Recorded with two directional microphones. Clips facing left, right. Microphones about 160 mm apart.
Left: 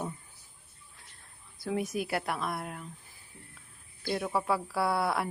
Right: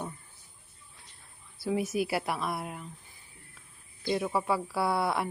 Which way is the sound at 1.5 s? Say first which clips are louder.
Right 3 dB; 5° right (ahead or behind).